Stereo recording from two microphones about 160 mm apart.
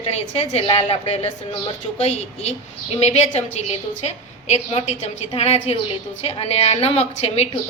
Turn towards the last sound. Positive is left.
turn(degrees=40)  # may be behind; listen again after turning